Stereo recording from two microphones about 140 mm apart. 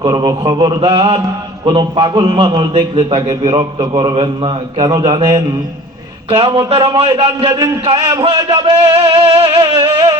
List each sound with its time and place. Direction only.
0.0 s a man's voice: 30° right (ahead or behind)
4.9 s a man's voice: 30° right (ahead or behind)
6.3 s a sound: 40° right (ahead or behind)
9.6 s a man's voice: 35° right (ahead or behind)